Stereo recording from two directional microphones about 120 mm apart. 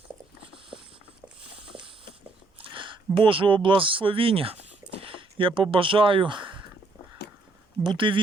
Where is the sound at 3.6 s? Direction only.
45° right (ahead or behind).